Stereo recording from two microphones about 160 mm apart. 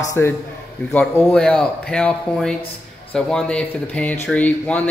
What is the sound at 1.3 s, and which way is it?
Speech, 5° left (ahead or behind).